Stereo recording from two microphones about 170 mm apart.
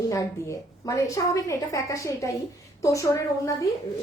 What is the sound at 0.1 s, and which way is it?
A woman's voice, 20° left (ahead or behind).